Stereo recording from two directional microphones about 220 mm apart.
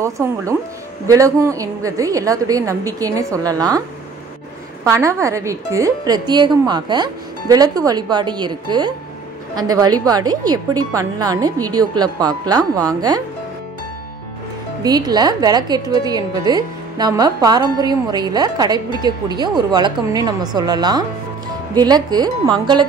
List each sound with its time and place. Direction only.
0.0 s a woman's voice: 15° right (ahead or behind)
4.8 s a woman's voice: 15° right (ahead or behind)
14.8 s a woman's voice: 20° right (ahead or behind)